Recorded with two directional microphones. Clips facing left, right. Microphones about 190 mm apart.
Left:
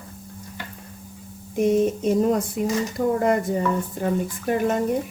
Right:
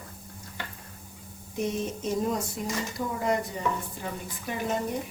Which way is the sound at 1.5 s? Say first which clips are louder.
Left 11 dB; 55° left (ahead or behind).